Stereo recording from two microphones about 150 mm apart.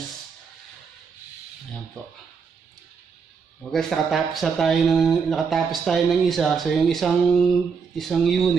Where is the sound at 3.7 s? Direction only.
Centre (ahead or behind).